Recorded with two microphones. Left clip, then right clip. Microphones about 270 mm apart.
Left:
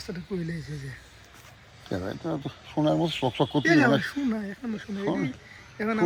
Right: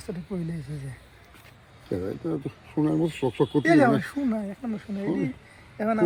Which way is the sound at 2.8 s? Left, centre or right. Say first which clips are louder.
Left 1 dB; centre.